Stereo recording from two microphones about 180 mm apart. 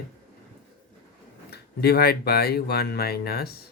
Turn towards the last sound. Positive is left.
turn(degrees=60)  # may be behind; listen again after turning